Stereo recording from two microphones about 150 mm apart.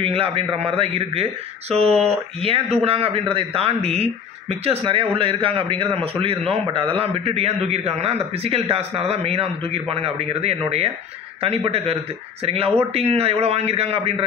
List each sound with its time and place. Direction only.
0.0 s a man's voice: 40° right (ahead or behind)